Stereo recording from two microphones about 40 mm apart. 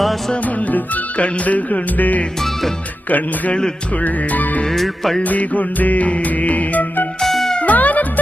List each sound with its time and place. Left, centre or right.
1.2 s music: left
4.7 s music: centre
5.3 s music: left
7.2 s music: centre
7.6 s music: left